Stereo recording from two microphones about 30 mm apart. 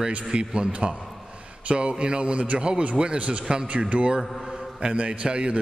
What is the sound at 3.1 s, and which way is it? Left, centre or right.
Speech, right.